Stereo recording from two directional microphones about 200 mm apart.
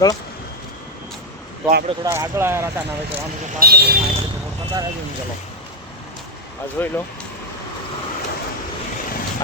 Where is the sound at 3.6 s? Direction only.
55° right (ahead or behind).